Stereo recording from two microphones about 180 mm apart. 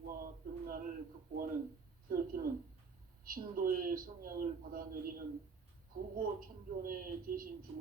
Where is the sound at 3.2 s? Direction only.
55° right (ahead or behind).